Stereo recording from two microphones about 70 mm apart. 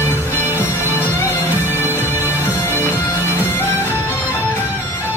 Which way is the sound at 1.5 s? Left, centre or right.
Right.